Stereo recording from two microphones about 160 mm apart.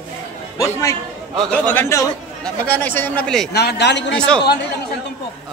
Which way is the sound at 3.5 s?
90° left.